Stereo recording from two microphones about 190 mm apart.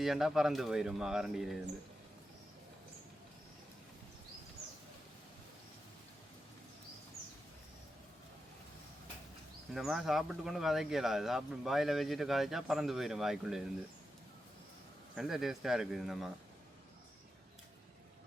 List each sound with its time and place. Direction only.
0.0 s speech: centre (ahead or behind)
9.7 s speech: centre (ahead or behind)
15.1 s speech: centre (ahead or behind)